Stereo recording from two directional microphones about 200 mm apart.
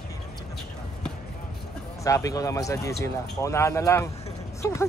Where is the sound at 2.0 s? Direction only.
15° left (ahead or behind).